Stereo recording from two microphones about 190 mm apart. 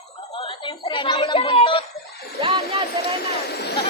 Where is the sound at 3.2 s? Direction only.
55° left (ahead or behind).